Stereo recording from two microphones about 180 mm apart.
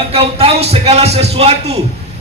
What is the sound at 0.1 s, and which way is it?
A man's voice, 30° right (ahead or behind).